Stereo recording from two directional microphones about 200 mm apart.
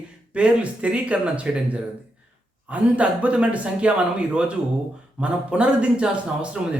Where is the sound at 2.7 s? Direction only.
5° right (ahead or behind).